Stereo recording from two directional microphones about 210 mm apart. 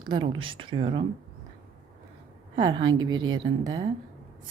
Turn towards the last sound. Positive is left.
turn(degrees=-20)  # may be behind; listen again after turning